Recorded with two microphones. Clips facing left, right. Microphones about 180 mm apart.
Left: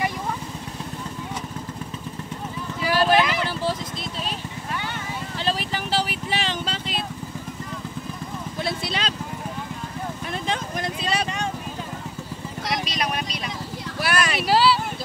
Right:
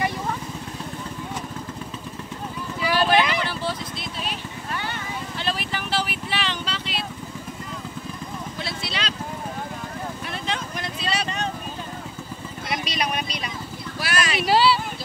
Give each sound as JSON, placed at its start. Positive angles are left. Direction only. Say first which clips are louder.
{"t": 2.9, "sound": "vehicle", "louder": "left 1 dB", "side_deg": 0}
{"t": 3.4, "sound": "vehicle", "louder": "left 2 dB", "side_deg": 40}
{"t": 5.4, "sound": "vehicle", "louder": "left 3 dB", "side_deg": 35}
{"t": 8.5, "sound": "vehicle", "louder": "left 6 dB", "side_deg": 50}
{"t": 10.4, "sound": "vehicle", "louder": "left 3 dB", "side_deg": 45}
{"t": 12.7, "sound": "vehicle", "louder": "right 1 dB", "side_deg": 0}
{"t": 13.9, "sound": "a sound", "louder": "left 2 dB", "side_deg": 55}
{"t": 14.4, "sound": "a sound", "louder": "right 1 dB", "side_deg": 0}